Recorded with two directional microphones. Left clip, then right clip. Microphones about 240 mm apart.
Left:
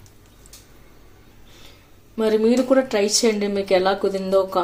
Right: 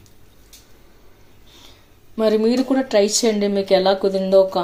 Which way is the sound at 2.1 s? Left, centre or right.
Centre.